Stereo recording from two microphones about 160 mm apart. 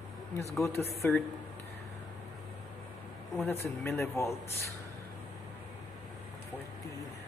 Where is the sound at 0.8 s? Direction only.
10° left (ahead or behind).